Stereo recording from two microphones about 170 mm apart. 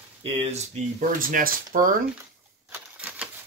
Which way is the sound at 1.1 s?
55° right (ahead or behind).